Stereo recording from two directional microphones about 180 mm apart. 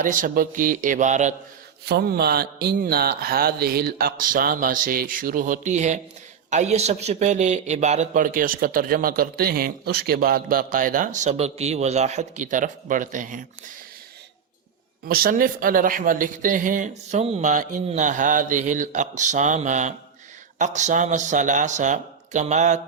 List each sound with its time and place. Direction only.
0.0 s speech: 50° right (ahead or behind)
1.8 s speech: 65° right (ahead or behind); by 13.4 s 45° right (ahead or behind)
15.0 s speech: 55° right (ahead or behind); by 22.8 s 40° right (ahead or behind)